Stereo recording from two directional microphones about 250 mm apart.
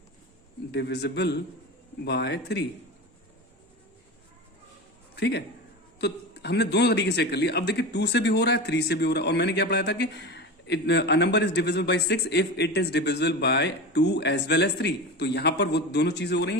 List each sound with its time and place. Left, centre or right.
0.7 s a man's voice: left
5.1 s a man's voice: left